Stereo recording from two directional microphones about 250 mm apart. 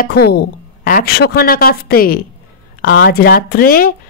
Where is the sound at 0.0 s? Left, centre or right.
Left.